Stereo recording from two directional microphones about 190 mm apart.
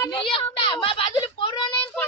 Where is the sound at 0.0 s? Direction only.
25° left (ahead or behind).